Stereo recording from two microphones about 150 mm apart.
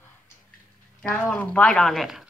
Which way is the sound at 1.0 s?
5° left (ahead or behind).